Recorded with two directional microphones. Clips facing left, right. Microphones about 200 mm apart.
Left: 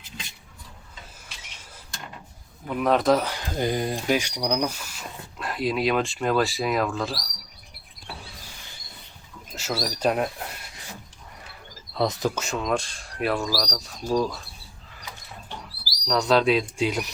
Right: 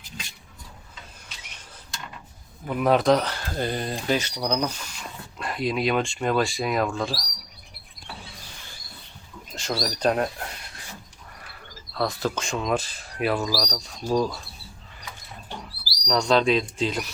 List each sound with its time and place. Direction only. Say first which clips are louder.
2.6 s speech: right 1 dB; centre (ahead or behind)
9.6 s speech: right 1 dB; 5° left (ahead or behind)
11.9 s speech: left 2 dB; 20° left (ahead or behind)
12.3 s speech: even; 5° left (ahead or behind)
16.0 s speech: even; 5° left (ahead or behind)